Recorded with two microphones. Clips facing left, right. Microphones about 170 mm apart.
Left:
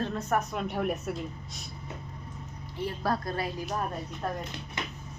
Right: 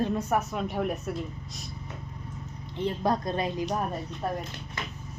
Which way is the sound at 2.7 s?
20° right (ahead or behind).